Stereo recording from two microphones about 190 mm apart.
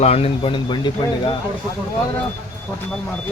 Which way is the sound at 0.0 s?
35° left (ahead or behind).